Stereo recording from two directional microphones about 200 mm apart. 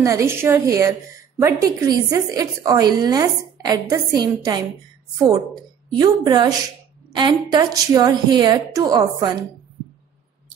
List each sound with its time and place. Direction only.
0.0 s a woman's voice: 15° right (ahead or behind)
5.9 s a woman's voice: 20° right (ahead or behind)